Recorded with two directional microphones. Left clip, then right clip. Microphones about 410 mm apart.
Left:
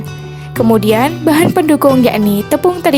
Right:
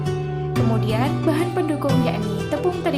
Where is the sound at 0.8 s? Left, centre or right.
Left.